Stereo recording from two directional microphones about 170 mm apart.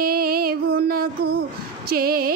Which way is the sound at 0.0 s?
60° right (ahead or behind).